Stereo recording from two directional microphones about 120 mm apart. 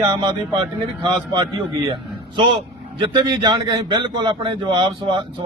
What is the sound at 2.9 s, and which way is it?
A man's voice, 40° right (ahead or behind).